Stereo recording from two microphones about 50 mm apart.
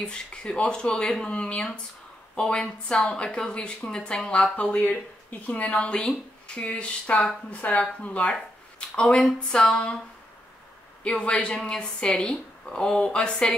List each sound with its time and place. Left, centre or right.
0.0 s speech: centre
4.6 s speech: left
11.1 s speech: centre